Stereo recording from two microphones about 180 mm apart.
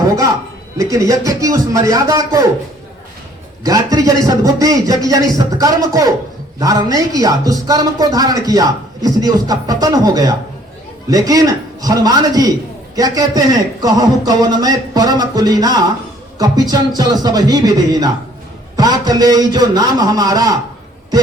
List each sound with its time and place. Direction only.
0.8 s speech: 20° right (ahead or behind)
3.6 s speech: 20° right (ahead or behind)